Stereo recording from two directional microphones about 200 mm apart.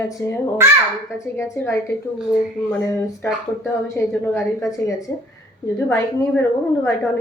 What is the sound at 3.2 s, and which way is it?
A woman's voice, 10° left (ahead or behind).